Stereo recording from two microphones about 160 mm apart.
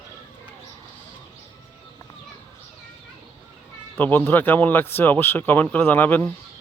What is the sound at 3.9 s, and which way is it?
Speech, 10° left (ahead or behind).